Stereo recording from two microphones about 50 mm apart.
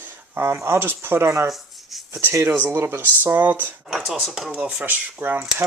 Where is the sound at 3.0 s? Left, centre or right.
Right.